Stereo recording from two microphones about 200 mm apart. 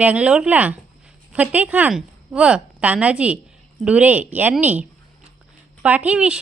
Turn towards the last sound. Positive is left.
turn(degrees=-5)  # may be behind; listen again after turning